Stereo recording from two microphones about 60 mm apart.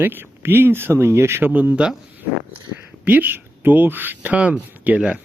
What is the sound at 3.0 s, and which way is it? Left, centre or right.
Speech, right.